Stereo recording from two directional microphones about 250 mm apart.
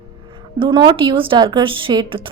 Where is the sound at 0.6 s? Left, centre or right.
Centre.